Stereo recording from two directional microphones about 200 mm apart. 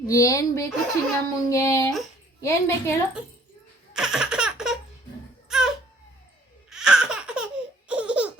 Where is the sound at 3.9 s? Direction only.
5° right (ahead or behind).